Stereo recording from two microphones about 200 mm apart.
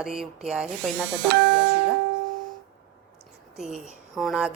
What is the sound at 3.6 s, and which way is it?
Speech, centre (ahead or behind).